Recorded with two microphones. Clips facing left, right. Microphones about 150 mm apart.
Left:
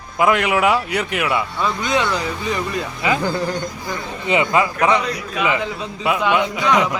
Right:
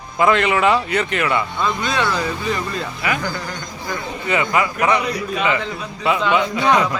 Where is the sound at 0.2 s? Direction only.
10° left (ahead or behind).